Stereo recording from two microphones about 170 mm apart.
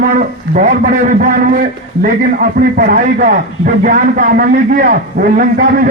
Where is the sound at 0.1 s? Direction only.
50° right (ahead or behind).